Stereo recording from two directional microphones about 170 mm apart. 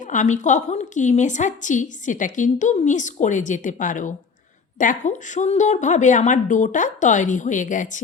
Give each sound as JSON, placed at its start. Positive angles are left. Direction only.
{"t": 0.0, "sound": "a woman's voice", "side_deg": 45}